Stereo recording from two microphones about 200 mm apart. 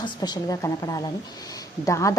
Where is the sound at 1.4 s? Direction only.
15° left (ahead or behind).